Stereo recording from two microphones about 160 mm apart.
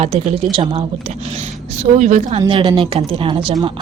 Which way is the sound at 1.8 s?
45° right (ahead or behind).